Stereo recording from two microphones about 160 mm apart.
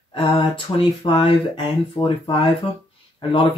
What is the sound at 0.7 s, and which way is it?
Speech, 20° left (ahead or behind).